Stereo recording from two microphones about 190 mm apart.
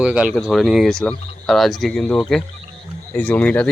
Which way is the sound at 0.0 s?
5° right (ahead or behind).